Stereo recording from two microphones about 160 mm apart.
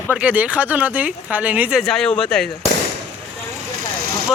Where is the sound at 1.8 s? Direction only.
Centre (ahead or behind).